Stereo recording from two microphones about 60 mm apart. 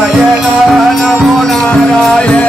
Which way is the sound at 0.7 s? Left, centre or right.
Centre.